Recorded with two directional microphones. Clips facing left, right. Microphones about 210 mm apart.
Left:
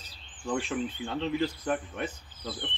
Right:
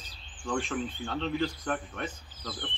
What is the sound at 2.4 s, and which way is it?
Cricket, 25° left (ahead or behind).